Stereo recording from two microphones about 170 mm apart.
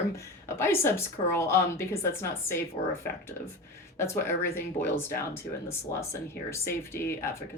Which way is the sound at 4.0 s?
15° left (ahead or behind).